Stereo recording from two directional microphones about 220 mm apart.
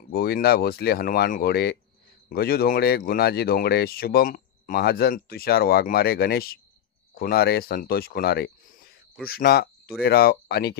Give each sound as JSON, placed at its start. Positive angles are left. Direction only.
{"t": 0.1, "sound": "speech", "side_deg": 45}